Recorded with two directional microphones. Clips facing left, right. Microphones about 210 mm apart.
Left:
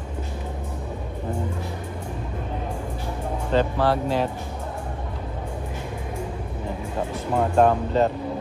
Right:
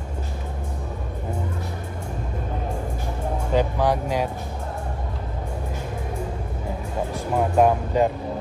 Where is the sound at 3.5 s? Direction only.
15° right (ahead or behind).